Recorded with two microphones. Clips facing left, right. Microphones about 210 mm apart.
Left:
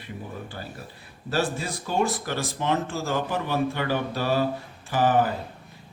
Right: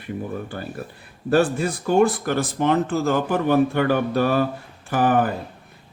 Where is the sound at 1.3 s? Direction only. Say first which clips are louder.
Right 8 dB; 55° right (ahead or behind).